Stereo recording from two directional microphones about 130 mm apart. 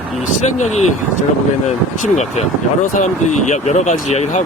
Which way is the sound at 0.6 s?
60° left (ahead or behind).